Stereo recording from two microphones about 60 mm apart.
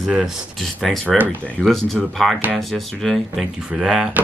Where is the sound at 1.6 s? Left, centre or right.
Centre.